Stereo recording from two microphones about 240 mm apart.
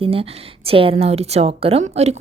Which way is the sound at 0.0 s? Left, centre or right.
Right.